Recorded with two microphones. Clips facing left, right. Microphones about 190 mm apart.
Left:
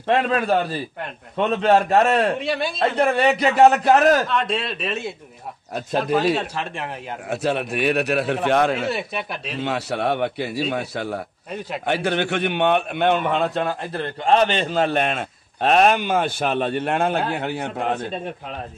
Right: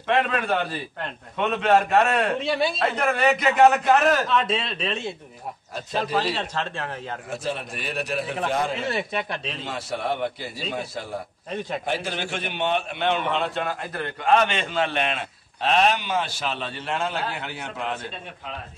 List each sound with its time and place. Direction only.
0.3 s a man's voice: 35° left (ahead or behind)
4.3 s speech: centre (ahead or behind)
6.3 s speech: 10° left (ahead or behind)
7.2 s a man's voice: 65° left (ahead or behind)
8.8 s speech: 5° left (ahead or behind)
9.6 s a man's voice: 70° left (ahead or behind); by 18.2 s 50° left (ahead or behind)